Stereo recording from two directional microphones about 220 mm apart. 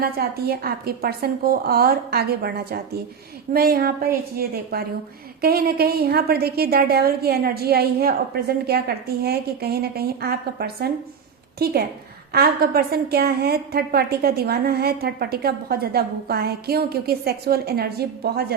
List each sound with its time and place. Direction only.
0.0 s a woman's voice: 45° right (ahead or behind)